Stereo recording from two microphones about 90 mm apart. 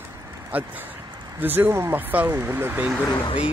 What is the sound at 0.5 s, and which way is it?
Speech, 20° right (ahead or behind).